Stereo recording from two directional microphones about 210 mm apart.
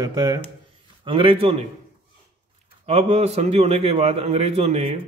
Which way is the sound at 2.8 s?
30° right (ahead or behind).